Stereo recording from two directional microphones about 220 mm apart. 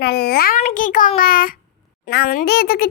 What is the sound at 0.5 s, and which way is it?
Child singing, 35° left (ahead or behind).